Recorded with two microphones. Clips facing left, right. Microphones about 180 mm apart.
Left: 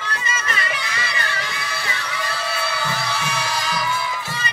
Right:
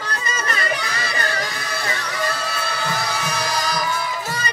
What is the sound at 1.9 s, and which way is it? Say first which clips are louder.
Music: right 6 dB; 45° right (ahead or behind).